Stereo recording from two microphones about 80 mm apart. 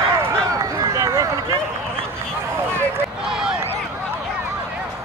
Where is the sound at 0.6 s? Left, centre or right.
Right.